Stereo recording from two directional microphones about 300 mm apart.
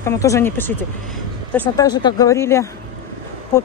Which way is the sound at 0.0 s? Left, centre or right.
Centre.